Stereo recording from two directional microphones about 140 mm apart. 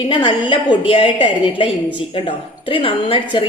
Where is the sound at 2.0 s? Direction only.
40° left (ahead or behind).